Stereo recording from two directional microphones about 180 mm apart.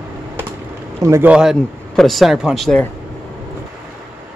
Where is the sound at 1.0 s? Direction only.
15° right (ahead or behind).